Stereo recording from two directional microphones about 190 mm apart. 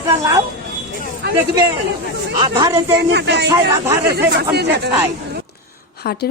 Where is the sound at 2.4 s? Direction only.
20° right (ahead or behind).